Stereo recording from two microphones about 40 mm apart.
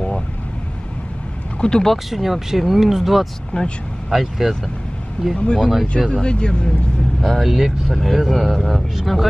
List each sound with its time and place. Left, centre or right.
1.6 s speech: centre
1.9 s speech: centre
3.5 s speech: left
4.1 s speech: centre
5.3 s speech: left
5.7 s speech: centre
6.0 s speech: centre
7.2 s speech: centre
7.5 s speech: centre